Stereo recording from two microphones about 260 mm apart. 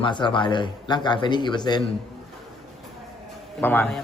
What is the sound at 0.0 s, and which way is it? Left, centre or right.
A man's voice, centre.